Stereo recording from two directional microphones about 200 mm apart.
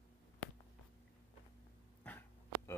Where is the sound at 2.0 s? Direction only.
10° left (ahead or behind).